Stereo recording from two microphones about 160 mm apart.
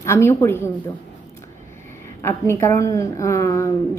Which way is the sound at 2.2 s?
15° left (ahead or behind).